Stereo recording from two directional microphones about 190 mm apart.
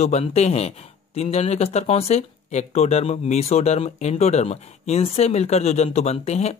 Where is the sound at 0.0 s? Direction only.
35° left (ahead or behind).